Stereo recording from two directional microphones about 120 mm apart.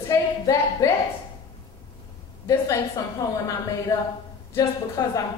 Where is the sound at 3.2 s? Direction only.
25° left (ahead or behind).